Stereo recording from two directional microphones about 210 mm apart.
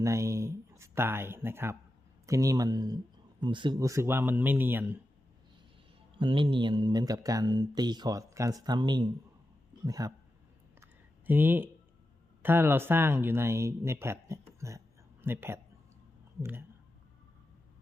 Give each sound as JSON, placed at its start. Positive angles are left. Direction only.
{"t": 0.0, "sound": "speech", "side_deg": -15}
{"t": 6.1, "sound": "speech", "side_deg": -25}
{"t": 11.3, "sound": "speech", "side_deg": -10}